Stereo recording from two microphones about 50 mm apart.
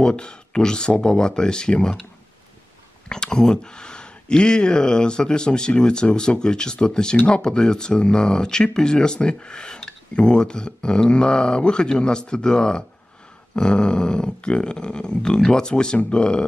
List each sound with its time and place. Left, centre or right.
0.0 s speech: centre
3.1 s speech: centre